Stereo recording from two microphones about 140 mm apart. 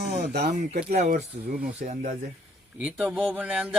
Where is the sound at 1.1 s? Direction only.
90° right; by 2.1 s 65° right (ahead or behind).